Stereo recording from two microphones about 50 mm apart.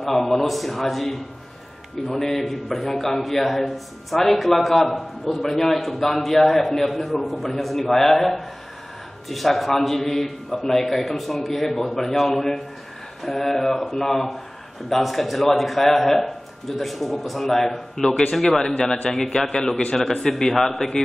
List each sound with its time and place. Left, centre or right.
0.0 s a man's voice: centre
18.6 s a man's voice: centre